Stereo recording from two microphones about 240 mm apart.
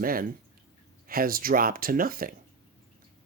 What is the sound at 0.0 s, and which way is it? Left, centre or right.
Speech, right.